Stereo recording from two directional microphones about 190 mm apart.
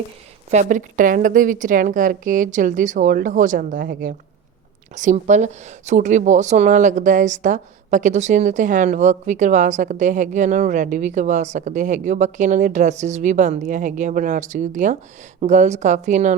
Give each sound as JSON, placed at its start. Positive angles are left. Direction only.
{"t": 0.5, "sound": "speech", "side_deg": -40}